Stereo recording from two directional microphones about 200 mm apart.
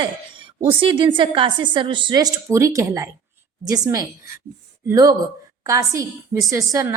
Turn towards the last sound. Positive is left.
turn(degrees=-15)  # may be behind; listen again after turning